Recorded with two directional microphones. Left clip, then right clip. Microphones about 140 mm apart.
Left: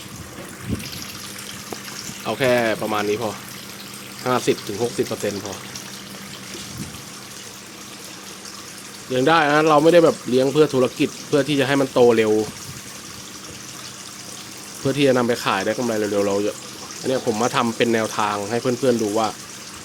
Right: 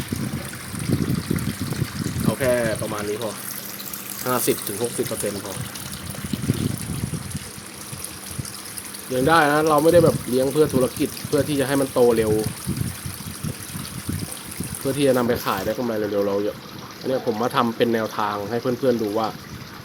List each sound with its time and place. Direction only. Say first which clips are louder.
2.2 s speech: left 3 dB; 25° left (ahead or behind)
4.2 s speech: left 2 dB; 10° left (ahead or behind)
9.1 s speech: left 1 dB; 5° left (ahead or behind)
14.8 s speech: left 2 dB; 10° left (ahead or behind)